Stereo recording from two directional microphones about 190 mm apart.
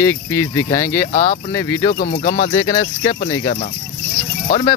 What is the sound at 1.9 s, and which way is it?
Speech, 40° left (ahead or behind).